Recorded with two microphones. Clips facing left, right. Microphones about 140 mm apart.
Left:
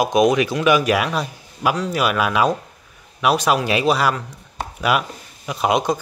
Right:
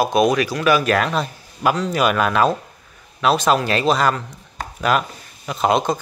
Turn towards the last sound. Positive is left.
turn(degrees=10)  # may be behind; listen again after turning